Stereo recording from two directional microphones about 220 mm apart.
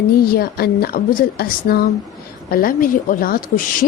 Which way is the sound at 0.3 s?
45° left (ahead or behind).